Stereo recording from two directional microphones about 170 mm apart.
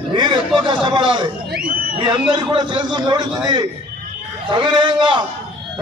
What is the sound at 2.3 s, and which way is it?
Speech, 25° right (ahead or behind).